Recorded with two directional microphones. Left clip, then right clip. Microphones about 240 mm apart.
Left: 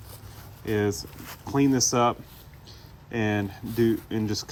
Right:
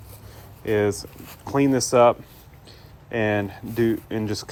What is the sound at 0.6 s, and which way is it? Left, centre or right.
Speech, centre.